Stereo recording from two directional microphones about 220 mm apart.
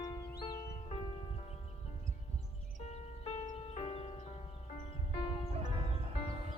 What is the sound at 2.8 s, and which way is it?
Music, 30° left (ahead or behind).